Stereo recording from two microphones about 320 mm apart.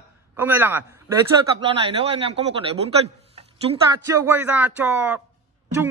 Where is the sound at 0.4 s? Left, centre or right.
Centre.